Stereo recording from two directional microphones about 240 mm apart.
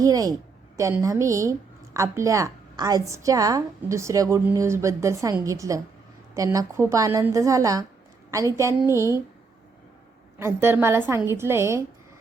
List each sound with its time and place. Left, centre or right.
0.0 s a woman's voice: centre
10.3 s a woman's voice: centre